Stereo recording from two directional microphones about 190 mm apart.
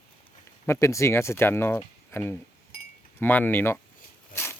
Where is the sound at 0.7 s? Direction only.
15° left (ahead or behind).